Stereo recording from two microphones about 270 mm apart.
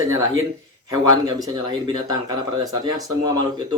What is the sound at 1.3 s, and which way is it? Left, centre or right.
Speech, centre.